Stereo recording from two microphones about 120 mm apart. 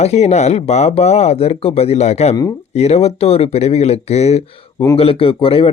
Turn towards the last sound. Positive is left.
turn(degrees=50)  # may be behind; listen again after turning